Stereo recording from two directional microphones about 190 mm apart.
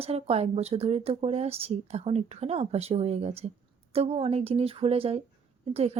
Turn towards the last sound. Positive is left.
turn(degrees=-35)  # may be behind; listen again after turning